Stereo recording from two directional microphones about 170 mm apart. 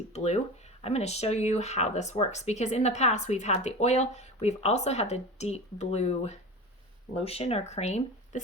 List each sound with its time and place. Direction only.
0.1 s speech: 40° left (ahead or behind)